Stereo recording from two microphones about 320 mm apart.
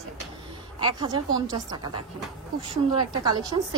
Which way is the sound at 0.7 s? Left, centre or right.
Centre.